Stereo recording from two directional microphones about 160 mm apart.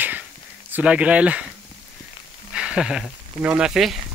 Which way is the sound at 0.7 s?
10° right (ahead or behind).